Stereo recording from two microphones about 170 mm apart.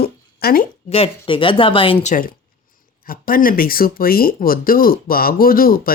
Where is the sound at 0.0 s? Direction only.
65° left (ahead or behind).